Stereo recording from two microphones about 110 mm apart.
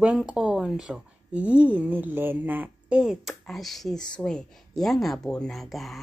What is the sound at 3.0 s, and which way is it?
Speech, 5° right (ahead or behind).